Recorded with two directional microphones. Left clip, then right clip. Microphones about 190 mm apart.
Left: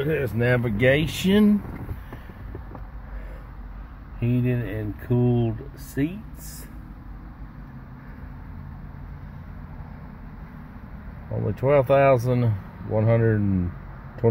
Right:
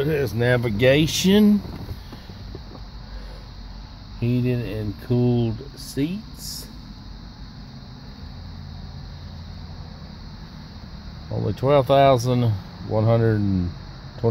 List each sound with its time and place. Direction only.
0.0 s speech: 30° right (ahead or behind)
4.2 s speech: 25° right (ahead or behind)
11.4 s speech: 15° right (ahead or behind)
14.2 s speech: 5° left (ahead or behind)